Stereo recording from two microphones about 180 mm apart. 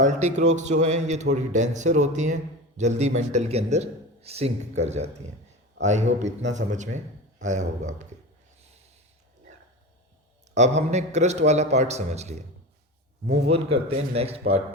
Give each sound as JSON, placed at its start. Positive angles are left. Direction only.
{"t": 0.0, "sound": "a man's voice", "side_deg": -40}
{"t": 10.5, "sound": "a man's voice", "side_deg": -40}